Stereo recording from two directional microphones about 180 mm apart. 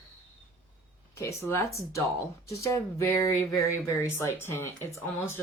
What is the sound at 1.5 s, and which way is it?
Speech, 15° left (ahead or behind).